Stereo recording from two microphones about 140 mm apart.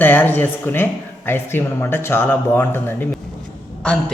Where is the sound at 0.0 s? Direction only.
15° left (ahead or behind).